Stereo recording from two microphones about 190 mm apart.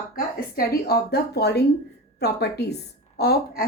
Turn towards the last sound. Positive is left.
turn(degrees=55)  # may be behind; listen again after turning